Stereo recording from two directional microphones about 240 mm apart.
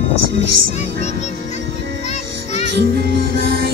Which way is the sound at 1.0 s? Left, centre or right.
Left.